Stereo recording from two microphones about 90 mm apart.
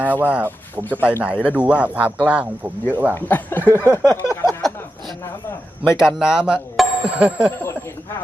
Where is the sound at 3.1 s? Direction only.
20° left (ahead or behind).